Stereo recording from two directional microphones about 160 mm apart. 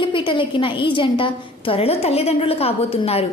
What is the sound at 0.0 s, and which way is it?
A woman's voice, 30° left (ahead or behind).